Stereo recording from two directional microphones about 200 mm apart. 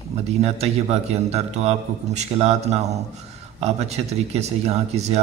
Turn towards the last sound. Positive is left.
turn(degrees=-30)  # may be behind; listen again after turning